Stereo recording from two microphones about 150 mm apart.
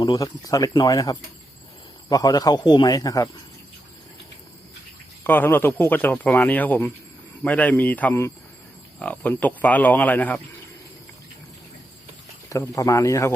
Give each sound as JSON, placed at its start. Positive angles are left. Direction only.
{"t": 0.0, "sound": "speech", "side_deg": 25}
{"t": 5.2, "sound": "speech", "side_deg": 15}
{"t": 12.5, "sound": "speech", "side_deg": 20}